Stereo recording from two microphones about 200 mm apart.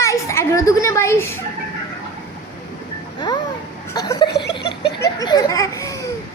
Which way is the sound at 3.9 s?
20° left (ahead or behind).